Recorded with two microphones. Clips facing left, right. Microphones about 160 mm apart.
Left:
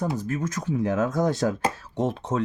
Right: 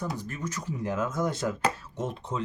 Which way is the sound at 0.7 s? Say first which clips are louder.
Left 8 dB; 80° left.